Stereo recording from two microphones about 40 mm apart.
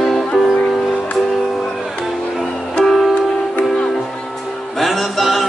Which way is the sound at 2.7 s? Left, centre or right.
Centre.